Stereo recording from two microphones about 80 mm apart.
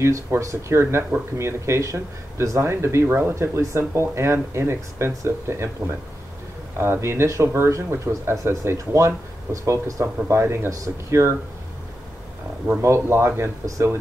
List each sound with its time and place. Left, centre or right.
0.0 s speech: right
12.8 s speech: right